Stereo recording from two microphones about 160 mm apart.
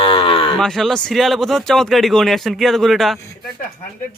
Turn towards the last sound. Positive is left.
turn(degrees=0)  # may be behind; listen again after turning